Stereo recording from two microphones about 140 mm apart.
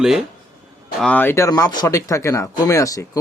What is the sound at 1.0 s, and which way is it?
Speech, 10° left (ahead or behind).